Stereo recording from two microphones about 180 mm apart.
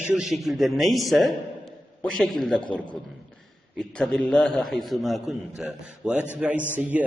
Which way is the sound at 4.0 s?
5° left (ahead or behind).